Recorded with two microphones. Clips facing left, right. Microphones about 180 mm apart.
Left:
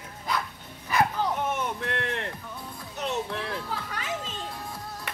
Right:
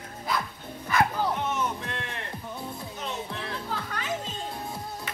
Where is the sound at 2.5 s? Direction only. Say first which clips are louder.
Right 4 dB; 25° right (ahead or behind).